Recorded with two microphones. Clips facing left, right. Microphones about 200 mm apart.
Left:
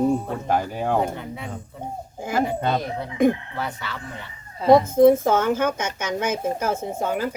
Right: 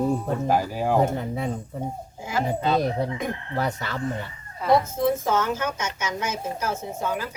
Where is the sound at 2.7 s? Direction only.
35° right (ahead or behind).